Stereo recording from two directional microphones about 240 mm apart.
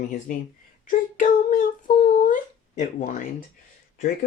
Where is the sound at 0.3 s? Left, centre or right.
Left.